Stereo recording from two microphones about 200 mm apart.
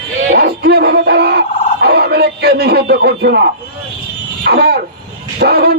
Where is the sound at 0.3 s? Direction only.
50° right (ahead or behind).